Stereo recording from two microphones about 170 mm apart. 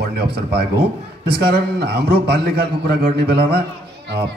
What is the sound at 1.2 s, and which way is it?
A man's voice, 65° right (ahead or behind).